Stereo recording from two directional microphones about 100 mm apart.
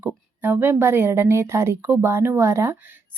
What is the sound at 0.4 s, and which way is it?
A woman's voice, 20° right (ahead or behind).